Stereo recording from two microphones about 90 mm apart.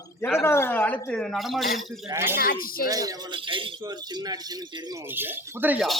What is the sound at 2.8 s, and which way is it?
Speech, 40° right (ahead or behind).